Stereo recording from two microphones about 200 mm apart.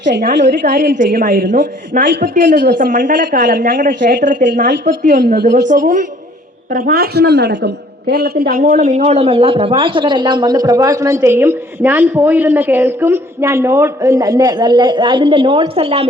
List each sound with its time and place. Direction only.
0.2 s a woman's voice: 40° right (ahead or behind)